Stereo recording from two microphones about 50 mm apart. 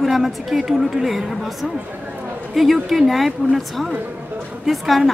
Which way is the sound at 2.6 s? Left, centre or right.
Centre.